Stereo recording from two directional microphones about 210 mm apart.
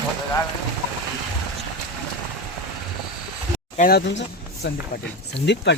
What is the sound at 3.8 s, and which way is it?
Speech, 45° left (ahead or behind).